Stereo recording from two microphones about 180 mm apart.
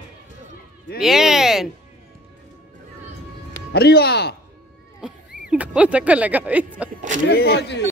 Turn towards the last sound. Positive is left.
turn(degrees=65)  # may be behind; listen again after turning